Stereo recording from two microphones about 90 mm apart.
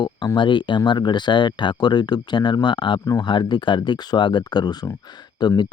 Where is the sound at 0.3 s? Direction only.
60° left (ahead or behind).